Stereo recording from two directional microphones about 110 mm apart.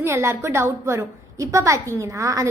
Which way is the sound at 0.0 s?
25° right (ahead or behind).